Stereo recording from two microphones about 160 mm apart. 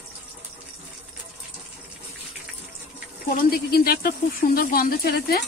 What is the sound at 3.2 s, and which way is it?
Speech, 65° left (ahead or behind).